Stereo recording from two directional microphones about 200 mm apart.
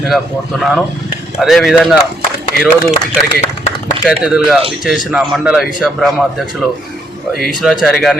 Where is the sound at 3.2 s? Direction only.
35° left (ahead or behind).